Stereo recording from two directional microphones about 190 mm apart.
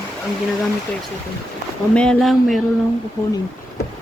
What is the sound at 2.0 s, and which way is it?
Speech, 5° left (ahead or behind).